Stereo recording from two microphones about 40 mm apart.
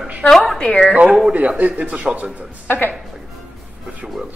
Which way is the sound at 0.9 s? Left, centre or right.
Right.